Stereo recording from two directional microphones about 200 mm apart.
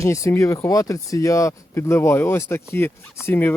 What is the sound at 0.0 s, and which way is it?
Speech, 15° left (ahead or behind).